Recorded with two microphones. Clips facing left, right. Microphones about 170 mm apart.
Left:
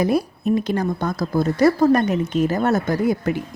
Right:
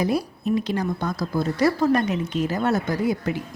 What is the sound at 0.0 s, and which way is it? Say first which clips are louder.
Speech: left 4 dB; 50° left (ahead or behind).